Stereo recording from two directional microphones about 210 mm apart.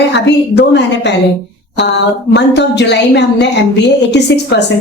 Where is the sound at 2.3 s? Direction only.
55° left (ahead or behind).